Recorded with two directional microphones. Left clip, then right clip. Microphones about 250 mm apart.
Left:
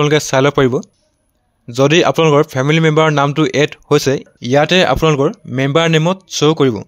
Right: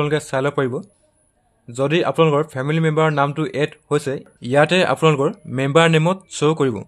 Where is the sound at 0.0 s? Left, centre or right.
Left.